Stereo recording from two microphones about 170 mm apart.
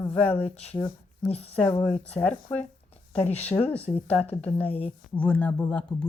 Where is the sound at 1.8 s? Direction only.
10° left (ahead or behind).